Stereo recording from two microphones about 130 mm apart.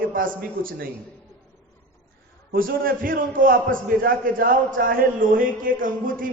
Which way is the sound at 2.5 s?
90° right.